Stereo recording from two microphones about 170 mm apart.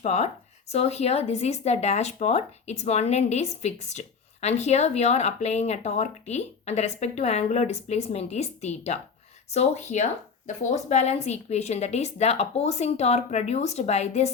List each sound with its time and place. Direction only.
0.0 s speech: 40° left (ahead or behind)